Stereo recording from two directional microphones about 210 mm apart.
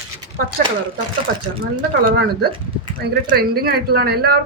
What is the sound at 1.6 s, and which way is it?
A woman's voice, 45° right (ahead or behind).